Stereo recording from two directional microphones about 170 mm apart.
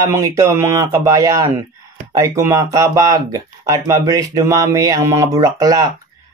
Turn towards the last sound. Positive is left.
turn(degrees=-20)  # may be behind; listen again after turning